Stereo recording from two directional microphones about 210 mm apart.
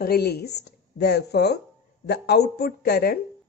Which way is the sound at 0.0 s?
50° left (ahead or behind).